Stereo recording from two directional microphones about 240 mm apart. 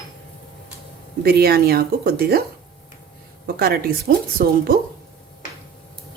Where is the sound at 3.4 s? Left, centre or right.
Right.